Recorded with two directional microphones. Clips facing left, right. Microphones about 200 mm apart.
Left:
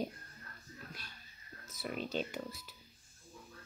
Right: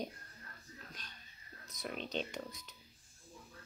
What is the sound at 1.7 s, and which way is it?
A child's voice, 5° left (ahead or behind).